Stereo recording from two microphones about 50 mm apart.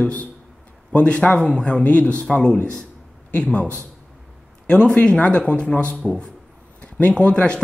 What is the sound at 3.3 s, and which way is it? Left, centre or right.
Speech, left.